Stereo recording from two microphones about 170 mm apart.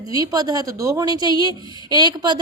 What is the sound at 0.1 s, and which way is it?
A woman's voice, 20° right (ahead or behind).